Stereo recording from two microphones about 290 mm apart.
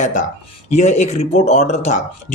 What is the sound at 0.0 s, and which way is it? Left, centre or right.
Speech, left.